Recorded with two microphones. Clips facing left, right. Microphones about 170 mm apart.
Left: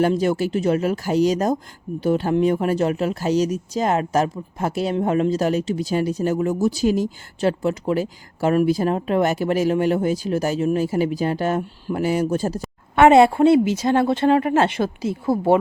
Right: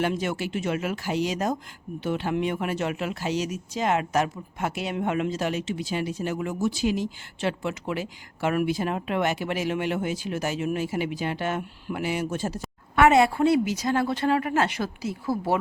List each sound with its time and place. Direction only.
0.0 s a woman's voice: 35° left (ahead or behind)